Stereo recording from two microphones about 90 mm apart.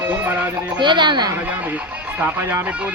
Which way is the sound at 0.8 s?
60° right (ahead or behind).